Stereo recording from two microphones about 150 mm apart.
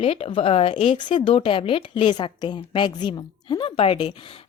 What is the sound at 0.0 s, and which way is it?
Speech, 40° left (ahead or behind).